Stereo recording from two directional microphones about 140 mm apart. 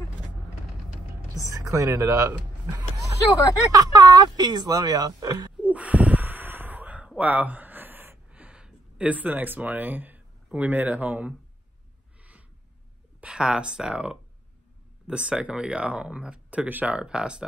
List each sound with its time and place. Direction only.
1.7 s speech: 20° right (ahead or behind)
3.7 s speech: 30° right (ahead or behind)
5.6 s gasp: 10° right (ahead or behind)
13.2 s speech: 5° right (ahead or behind)